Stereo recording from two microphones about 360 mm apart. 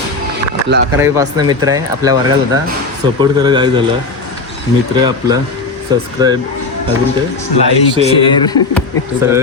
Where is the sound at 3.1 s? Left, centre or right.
Centre.